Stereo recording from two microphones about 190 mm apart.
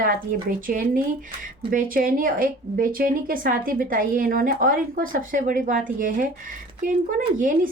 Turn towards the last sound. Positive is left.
turn(degrees=-45)  # may be behind; listen again after turning